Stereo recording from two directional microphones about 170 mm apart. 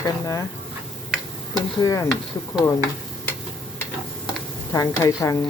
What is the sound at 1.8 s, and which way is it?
Speech, 20° left (ahead or behind).